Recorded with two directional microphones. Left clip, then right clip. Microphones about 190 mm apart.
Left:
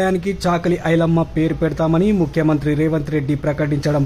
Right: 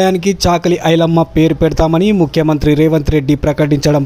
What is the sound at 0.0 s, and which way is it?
Speech, 25° right (ahead or behind).